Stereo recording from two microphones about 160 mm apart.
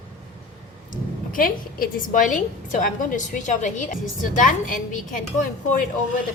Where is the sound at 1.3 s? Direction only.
60° left (ahead or behind).